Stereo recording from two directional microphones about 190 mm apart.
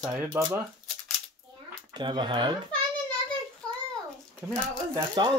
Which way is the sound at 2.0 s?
25° right (ahead or behind).